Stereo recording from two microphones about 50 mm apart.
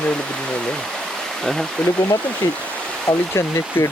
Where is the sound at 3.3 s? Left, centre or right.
Left.